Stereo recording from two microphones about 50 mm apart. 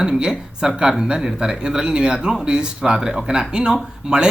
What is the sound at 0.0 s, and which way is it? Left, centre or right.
Speech, centre.